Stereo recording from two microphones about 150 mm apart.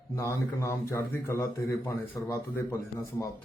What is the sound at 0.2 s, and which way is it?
Speech, 20° left (ahead or behind).